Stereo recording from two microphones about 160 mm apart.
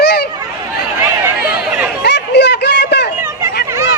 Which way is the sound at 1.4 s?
85° left.